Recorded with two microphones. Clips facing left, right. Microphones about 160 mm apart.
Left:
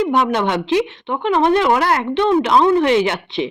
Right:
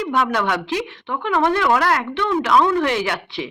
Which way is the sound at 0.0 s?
20° left (ahead or behind).